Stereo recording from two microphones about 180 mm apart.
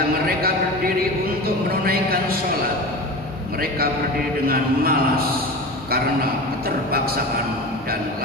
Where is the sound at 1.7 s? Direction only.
55° right (ahead or behind).